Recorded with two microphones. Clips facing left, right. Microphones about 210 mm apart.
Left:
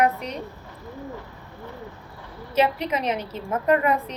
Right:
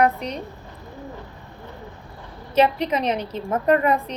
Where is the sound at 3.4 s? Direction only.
35° right (ahead or behind).